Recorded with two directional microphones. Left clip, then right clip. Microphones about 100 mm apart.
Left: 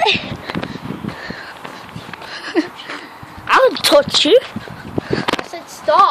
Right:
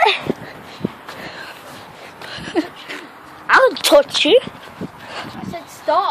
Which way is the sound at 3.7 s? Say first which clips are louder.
Even; 5° left (ahead or behind).